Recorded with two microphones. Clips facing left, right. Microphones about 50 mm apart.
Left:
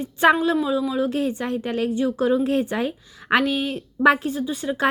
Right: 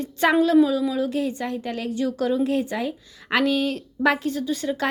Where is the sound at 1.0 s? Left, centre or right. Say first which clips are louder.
Left 2 dB; left.